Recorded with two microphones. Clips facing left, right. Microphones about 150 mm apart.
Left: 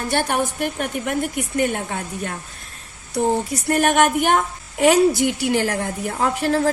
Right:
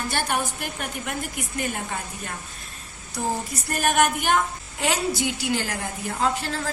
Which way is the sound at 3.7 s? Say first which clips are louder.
Left 5 dB; 55° left (ahead or behind).